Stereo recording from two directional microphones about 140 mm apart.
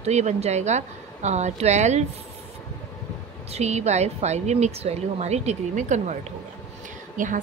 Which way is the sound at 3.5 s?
55° right (ahead or behind).